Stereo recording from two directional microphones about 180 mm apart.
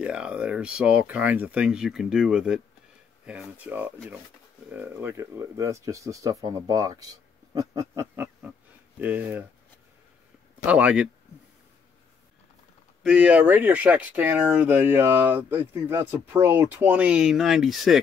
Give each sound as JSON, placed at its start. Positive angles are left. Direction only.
{"t": 0.0, "sound": "speech", "side_deg": -5}
{"t": 10.7, "sound": "speech", "side_deg": -5}
{"t": 13.0, "sound": "speech", "side_deg": -5}